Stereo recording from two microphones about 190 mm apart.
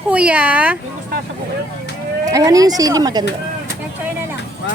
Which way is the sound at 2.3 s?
20° right (ahead or behind).